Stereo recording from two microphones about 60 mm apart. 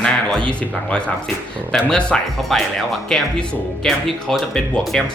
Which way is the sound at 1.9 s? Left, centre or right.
Centre.